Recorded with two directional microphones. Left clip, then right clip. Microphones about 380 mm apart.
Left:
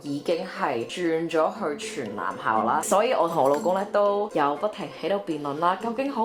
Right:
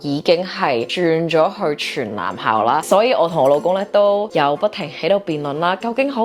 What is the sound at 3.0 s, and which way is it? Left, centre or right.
Speech, right.